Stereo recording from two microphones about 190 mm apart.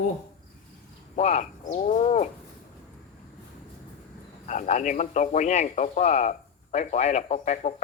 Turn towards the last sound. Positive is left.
turn(degrees=40)  # may be behind; listen again after turning